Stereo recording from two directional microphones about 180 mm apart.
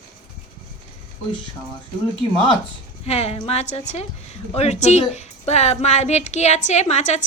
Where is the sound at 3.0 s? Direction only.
35° left (ahead or behind).